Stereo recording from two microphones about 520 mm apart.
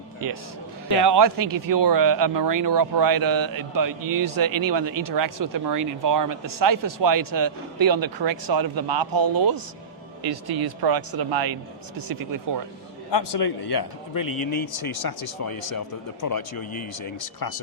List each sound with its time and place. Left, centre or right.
1.0 s speech: right
13.1 s a man's voice: left
17.4 s a man's voice: left